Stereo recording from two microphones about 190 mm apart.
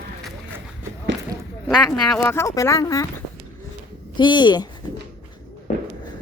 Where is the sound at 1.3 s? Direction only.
20° right (ahead or behind).